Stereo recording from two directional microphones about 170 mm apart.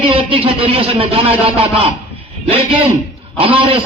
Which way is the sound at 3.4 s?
30° right (ahead or behind).